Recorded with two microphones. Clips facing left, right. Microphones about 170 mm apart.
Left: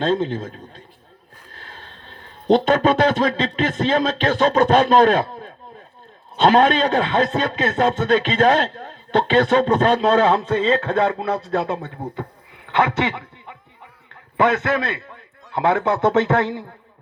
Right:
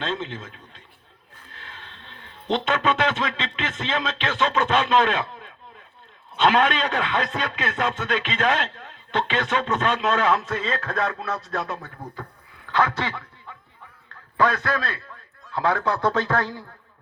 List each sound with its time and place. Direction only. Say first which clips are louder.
0.0 s a man's voice: left 9 dB; 40° left (ahead or behind); by 16.7 s 20° left (ahead or behind)